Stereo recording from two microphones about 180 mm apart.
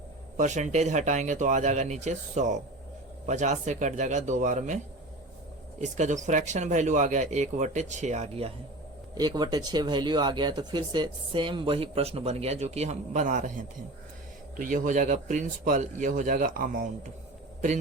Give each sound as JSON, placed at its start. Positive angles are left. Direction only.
{"t": 0.3, "sound": "speech", "side_deg": -40}
{"t": 5.8, "sound": "speech", "side_deg": -40}
{"t": 9.1, "sound": "speech", "side_deg": -20}